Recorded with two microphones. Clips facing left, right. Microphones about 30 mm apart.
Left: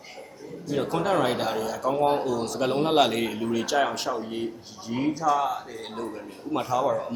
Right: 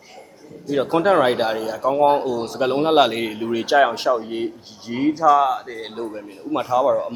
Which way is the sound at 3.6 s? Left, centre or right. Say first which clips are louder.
Right 11 dB; right.